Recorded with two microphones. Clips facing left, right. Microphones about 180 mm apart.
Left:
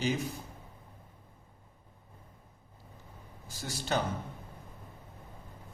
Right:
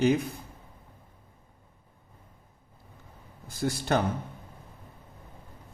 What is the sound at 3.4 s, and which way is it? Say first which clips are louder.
Speech: right 10 dB; 55° right (ahead or behind).